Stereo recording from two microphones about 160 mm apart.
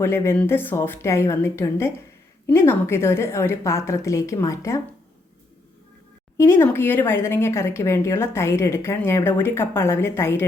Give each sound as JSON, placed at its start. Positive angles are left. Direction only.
{"t": 0.0, "sound": "speech", "side_deg": 15}
{"t": 6.3, "sound": "speech", "side_deg": 15}